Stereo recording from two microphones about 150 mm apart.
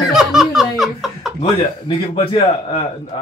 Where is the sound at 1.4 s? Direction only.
40° left (ahead or behind).